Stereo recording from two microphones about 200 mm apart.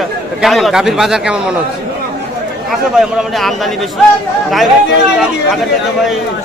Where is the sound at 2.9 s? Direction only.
Centre (ahead or behind).